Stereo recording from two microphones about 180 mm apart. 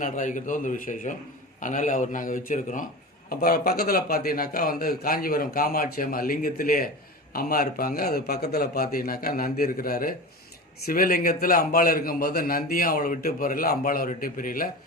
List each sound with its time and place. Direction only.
0.0 s a man's voice: 45° left (ahead or behind)
3.2 s a man's voice: 55° left (ahead or behind)